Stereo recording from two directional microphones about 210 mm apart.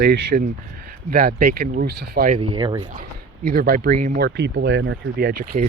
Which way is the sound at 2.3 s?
20° right (ahead or behind).